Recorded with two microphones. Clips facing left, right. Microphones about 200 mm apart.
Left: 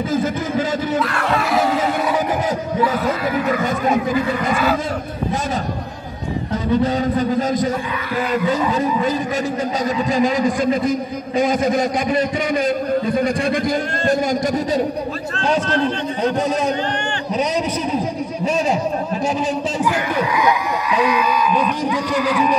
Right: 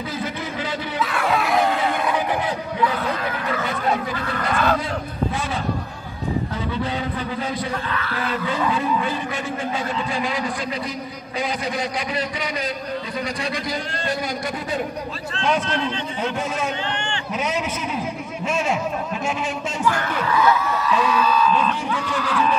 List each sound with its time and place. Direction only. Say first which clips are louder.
0.1 s a sound: left 9 dB; 45° left (ahead or behind)
0.9 s crowd: left 3 dB; centre (ahead or behind)
2.8 s speech: left 4 dB; 10° left (ahead or behind)
6.8 s a man's voice: left 8 dB; 45° left (ahead or behind)
10.1 s a man's voice: left 8 dB; 45° left (ahead or behind)
15.3 s a man's voice: left 3 dB; 40° left (ahead or behind)
17.9 s a sound: left 6 dB; 35° left (ahead or behind)
19.8 s speech: even; 15° left (ahead or behind)